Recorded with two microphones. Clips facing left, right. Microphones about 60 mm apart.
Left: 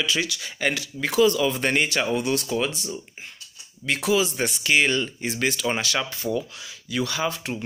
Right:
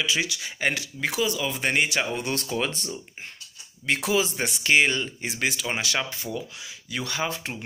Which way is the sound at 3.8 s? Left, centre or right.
Right.